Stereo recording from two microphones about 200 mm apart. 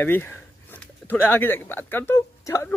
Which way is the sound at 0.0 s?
10° left (ahead or behind).